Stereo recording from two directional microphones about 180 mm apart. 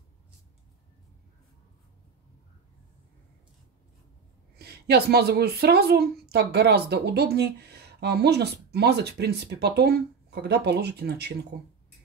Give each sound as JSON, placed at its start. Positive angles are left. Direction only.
{"t": 4.6, "sound": "a woman's voice", "side_deg": -65}